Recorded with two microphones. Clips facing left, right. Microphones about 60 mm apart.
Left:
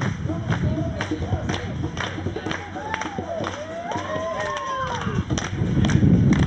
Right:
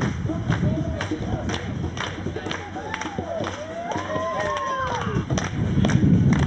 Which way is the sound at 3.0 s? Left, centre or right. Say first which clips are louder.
Even; centre.